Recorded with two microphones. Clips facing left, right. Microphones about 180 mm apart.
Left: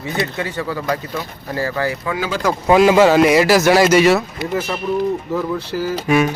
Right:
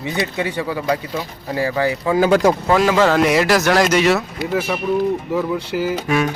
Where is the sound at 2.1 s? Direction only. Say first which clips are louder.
Right 9 dB; 50° right (ahead or behind).